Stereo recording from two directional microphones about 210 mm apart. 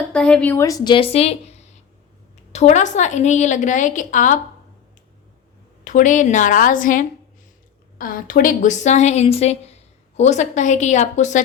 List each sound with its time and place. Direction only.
0.1 s a woman's voice: 5° left (ahead or behind); by 4.4 s 35° left (ahead or behind)
5.8 s a woman's voice: 35° left (ahead or behind)